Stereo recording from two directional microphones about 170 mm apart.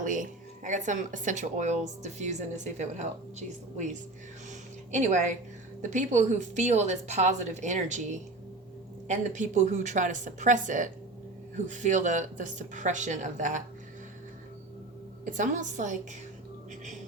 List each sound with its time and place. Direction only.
0.0 s speech: 50° right (ahead or behind)
4.9 s speech: 45° right (ahead or behind)
15.2 s speech: 50° right (ahead or behind)